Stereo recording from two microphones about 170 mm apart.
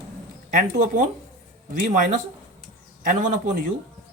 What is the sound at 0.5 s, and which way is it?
A man's voice, 50° right (ahead or behind).